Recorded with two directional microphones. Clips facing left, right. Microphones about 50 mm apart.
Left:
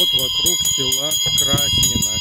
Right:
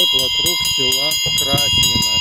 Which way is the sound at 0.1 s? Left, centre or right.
Right.